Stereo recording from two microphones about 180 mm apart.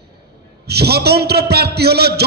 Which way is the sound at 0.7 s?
65° right (ahead or behind).